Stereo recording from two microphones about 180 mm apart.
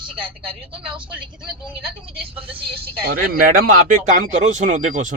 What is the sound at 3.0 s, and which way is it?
Speech, 55° right (ahead or behind).